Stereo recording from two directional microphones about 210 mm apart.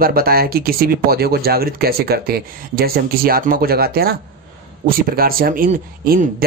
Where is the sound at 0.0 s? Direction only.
45° right (ahead or behind).